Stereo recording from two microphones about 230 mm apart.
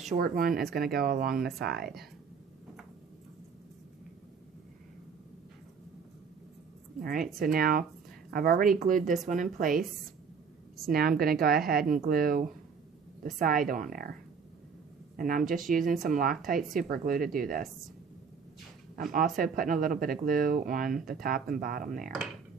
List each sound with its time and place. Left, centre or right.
0.1 s speech: right
7.0 s speech: right
10.9 s speech: right
15.1 s speech: right
18.9 s speech: right